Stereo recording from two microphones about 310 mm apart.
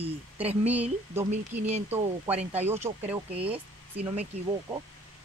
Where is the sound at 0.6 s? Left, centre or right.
Centre.